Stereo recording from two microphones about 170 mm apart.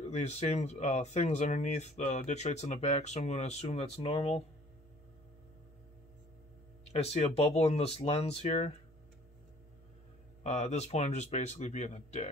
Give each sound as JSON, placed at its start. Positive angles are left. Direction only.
{"t": 0.0, "sound": "speech", "side_deg": 40}
{"t": 6.9, "sound": "speech", "side_deg": 35}
{"t": 10.4, "sound": "speech", "side_deg": 40}